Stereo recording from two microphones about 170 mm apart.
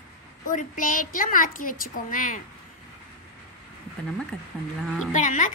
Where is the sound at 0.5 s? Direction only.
50° left (ahead or behind).